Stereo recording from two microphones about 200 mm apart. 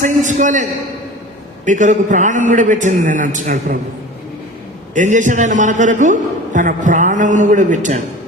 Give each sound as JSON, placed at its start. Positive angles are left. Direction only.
{"t": 0.0, "sound": "a man's voice", "side_deg": -40}
{"t": 4.9, "sound": "a man's voice", "side_deg": -40}